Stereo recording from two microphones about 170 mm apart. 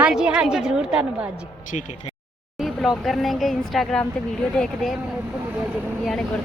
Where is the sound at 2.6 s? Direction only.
Centre (ahead or behind).